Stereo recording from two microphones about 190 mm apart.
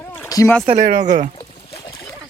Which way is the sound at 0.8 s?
45° right (ahead or behind).